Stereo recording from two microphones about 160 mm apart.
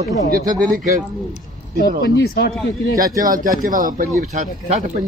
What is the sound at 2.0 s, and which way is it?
Speech, 90° left.